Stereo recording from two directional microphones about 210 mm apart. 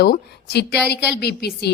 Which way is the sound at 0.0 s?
50° left (ahead or behind).